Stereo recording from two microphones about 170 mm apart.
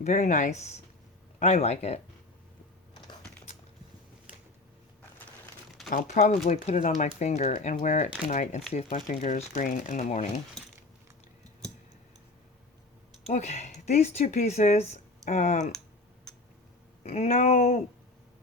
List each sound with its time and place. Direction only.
0.0 s speech: 45° left (ahead or behind)
6.1 s speech: 40° left (ahead or behind)
10.6 s a sound: centre (ahead or behind)
13.2 s speech: 40° left (ahead or behind)
17.0 s speech: 40° left (ahead or behind)